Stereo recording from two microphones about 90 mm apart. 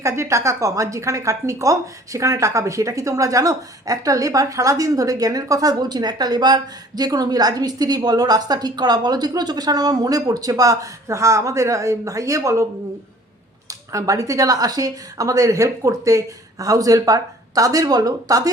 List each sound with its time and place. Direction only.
0.0 s a woman's voice: 35° right (ahead or behind)
13.7 s a woman's voice: 40° right (ahead or behind)